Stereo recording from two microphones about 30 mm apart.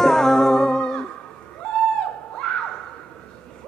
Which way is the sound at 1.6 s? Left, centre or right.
Left.